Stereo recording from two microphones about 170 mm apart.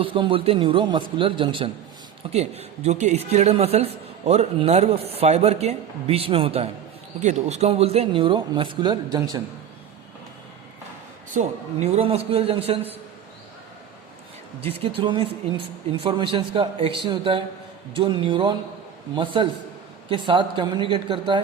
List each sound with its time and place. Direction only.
0.0 s a man's voice: 30° right (ahead or behind)
11.3 s a man's voice: 40° right (ahead or behind)
14.6 s a man's voice: 35° right (ahead or behind)